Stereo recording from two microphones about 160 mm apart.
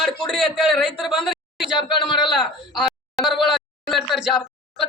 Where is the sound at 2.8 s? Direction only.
Centre (ahead or behind).